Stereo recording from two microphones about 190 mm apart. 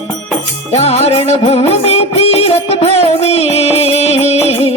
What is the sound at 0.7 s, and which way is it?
Music, 35° left (ahead or behind).